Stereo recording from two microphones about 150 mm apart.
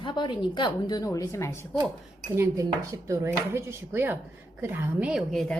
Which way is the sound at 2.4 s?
20° right (ahead or behind).